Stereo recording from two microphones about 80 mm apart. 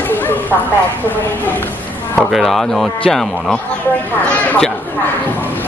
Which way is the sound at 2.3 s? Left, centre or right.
Centre.